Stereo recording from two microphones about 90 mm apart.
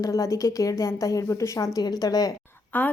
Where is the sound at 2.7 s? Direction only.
20° left (ahead or behind).